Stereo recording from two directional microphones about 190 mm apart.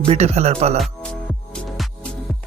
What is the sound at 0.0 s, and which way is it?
Speech, 35° right (ahead or behind).